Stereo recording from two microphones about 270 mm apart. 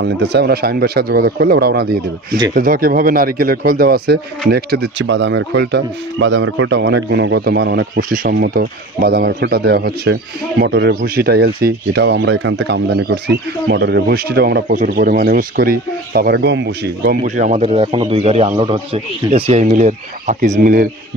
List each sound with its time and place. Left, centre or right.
0.0 s speech: right